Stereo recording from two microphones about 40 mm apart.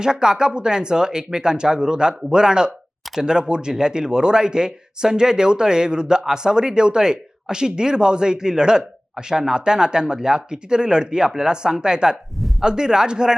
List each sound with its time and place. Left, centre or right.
0.0 s speech: centre
12.4 s a sound: centre
12.6 s speech: centre